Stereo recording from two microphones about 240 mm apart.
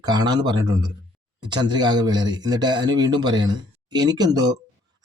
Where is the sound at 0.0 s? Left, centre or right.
Centre.